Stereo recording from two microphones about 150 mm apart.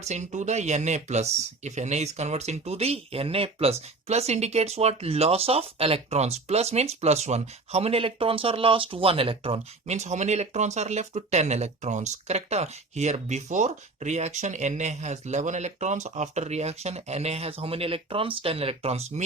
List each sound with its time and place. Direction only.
0.0 s speech: 50° right (ahead or behind)